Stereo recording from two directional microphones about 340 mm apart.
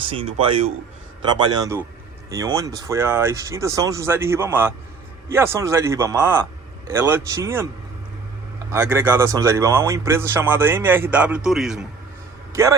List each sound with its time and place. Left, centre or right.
0.0 s speech: centre